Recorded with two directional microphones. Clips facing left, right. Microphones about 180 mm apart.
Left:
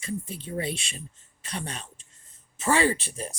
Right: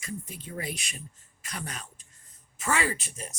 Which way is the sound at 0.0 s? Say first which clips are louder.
Left 5 dB; 30° left (ahead or behind).